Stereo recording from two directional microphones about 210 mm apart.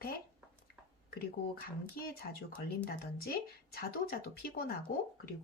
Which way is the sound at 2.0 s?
45° left (ahead or behind).